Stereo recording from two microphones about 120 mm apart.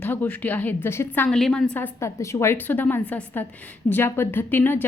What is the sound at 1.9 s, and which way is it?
A woman's voice, 25° left (ahead or behind).